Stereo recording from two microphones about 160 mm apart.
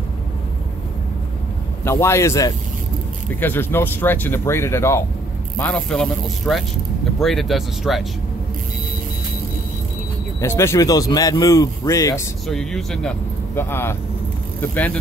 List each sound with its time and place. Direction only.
1.9 s speech: 15° left (ahead or behind)
5.6 s speech: 5° left (ahead or behind)
10.4 s speech: 15° left (ahead or behind)
12.4 s speech: 5° left (ahead or behind)
13.6 s speech: 15° left (ahead or behind)